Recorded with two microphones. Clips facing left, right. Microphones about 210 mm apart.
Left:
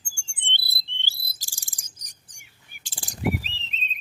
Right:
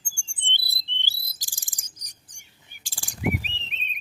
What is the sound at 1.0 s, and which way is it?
Bird vocalization, 15° right (ahead or behind).